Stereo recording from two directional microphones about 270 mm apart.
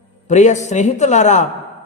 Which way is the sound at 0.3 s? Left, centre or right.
Left.